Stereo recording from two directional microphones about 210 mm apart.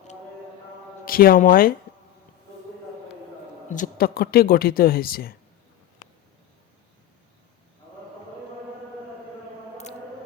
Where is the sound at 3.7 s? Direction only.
40° left (ahead or behind).